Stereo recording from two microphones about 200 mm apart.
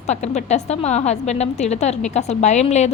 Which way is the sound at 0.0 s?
35° left (ahead or behind).